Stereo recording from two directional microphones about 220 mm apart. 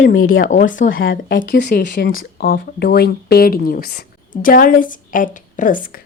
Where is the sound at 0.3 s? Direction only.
40° left (ahead or behind).